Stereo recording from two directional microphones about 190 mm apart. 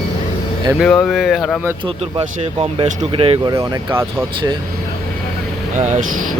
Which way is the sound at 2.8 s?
30° right (ahead or behind).